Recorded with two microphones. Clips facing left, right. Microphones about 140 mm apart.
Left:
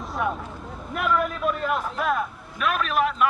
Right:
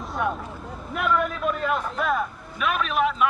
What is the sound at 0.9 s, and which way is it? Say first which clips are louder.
A man's voice: even; centre (ahead or behind).